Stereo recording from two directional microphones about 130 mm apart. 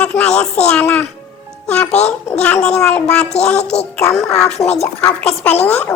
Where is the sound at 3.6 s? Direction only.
55° left (ahead or behind).